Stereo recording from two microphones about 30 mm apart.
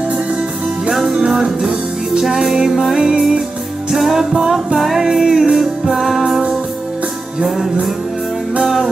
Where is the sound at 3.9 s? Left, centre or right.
Centre.